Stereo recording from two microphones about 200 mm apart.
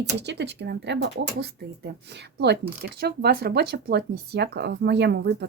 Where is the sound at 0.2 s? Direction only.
60° right (ahead or behind).